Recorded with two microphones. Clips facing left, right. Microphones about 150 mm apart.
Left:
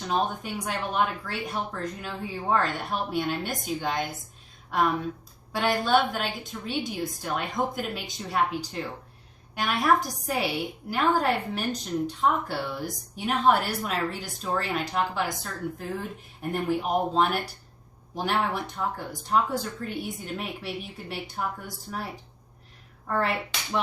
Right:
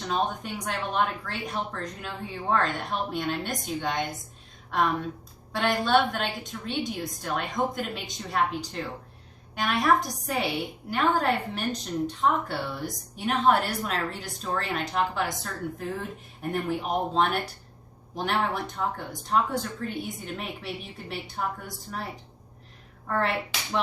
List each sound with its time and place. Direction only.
0.0 s a woman's voice: 5° left (ahead or behind)